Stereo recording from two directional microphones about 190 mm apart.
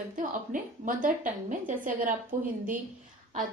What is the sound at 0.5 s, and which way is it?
Speech, 45° right (ahead or behind).